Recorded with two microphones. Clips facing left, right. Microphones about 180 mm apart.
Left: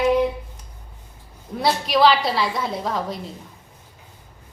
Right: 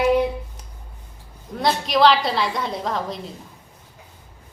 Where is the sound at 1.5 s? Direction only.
5° left (ahead or behind).